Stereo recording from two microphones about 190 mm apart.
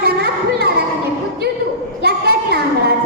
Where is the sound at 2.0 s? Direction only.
55° right (ahead or behind).